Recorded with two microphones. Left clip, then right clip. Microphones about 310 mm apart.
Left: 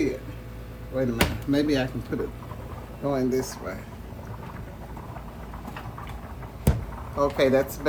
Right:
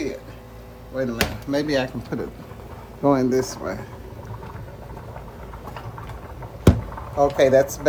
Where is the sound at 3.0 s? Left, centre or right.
Centre.